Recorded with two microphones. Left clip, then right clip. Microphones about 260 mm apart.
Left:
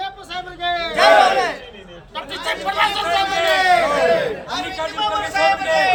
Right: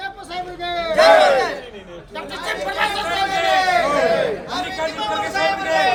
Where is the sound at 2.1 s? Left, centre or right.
Centre.